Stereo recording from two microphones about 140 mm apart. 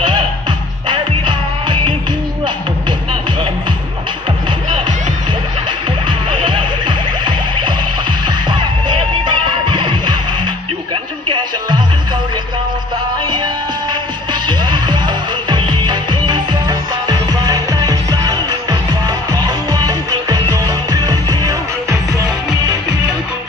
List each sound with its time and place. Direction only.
0.9 s music: 35° right (ahead or behind)
6.1 s music: 35° right (ahead or behind)
14.4 s music: 30° right (ahead or behind)